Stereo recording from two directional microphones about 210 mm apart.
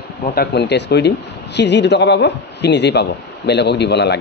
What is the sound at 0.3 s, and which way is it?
A man's voice, 50° left (ahead or behind).